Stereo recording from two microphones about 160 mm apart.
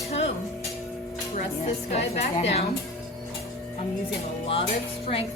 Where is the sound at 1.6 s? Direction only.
40° left (ahead or behind).